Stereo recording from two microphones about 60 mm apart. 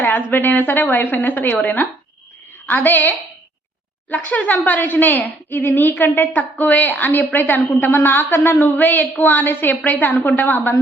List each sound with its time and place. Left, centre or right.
0.0 s a woman's voice: left